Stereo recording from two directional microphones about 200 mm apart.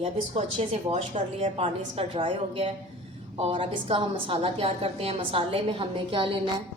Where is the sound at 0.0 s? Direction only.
30° right (ahead or behind).